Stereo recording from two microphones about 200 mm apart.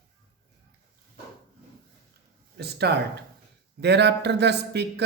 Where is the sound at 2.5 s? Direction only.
55° right (ahead or behind).